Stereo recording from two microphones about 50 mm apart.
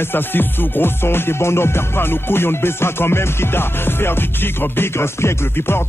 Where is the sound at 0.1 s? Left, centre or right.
Left.